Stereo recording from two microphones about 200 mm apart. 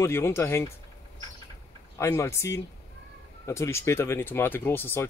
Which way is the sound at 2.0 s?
15° left (ahead or behind).